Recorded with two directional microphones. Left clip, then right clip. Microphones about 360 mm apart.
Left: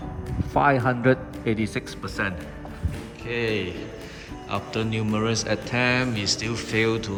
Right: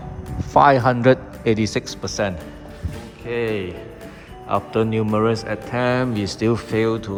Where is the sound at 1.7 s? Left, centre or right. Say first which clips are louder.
Right 6 dB; centre.